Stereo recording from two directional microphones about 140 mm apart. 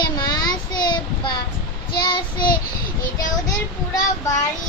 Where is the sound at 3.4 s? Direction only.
20° left (ahead or behind).